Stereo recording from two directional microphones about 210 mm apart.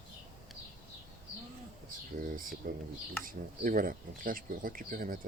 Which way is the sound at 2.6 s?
40° right (ahead or behind).